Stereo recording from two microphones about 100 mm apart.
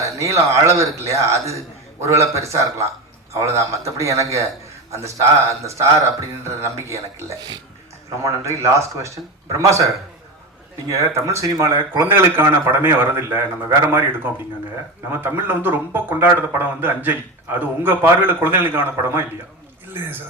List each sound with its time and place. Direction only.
0.2 s a man's voice: 30° right (ahead or behind)
10.8 s speech: 30° right (ahead or behind)
15.1 s speech: 20° right (ahead or behind)